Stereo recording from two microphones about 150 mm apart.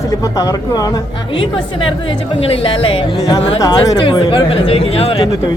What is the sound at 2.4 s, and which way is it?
Speech, 40° left (ahead or behind).